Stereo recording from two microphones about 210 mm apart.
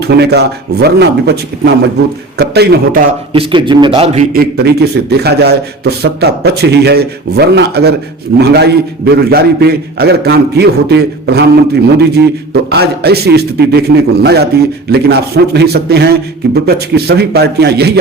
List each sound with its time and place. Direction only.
0.0 s a man's voice: 50° right (ahead or behind)
3.3 s a man's voice: 25° right (ahead or behind)
4.3 s a man's voice: 50° right (ahead or behind)